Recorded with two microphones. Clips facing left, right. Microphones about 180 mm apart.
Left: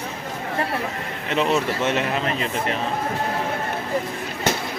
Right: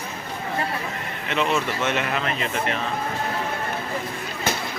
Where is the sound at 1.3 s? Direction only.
35° left (ahead or behind).